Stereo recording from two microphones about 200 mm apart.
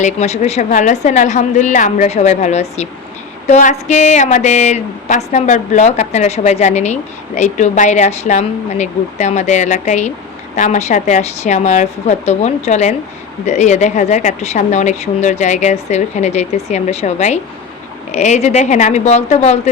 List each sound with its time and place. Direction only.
0.0 s speech: 35° left (ahead or behind)